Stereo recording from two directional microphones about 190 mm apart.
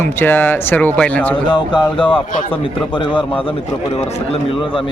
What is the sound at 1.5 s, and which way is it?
Speech, 25° left (ahead or behind).